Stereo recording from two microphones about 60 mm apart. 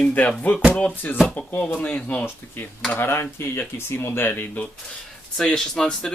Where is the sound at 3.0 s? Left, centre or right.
Left.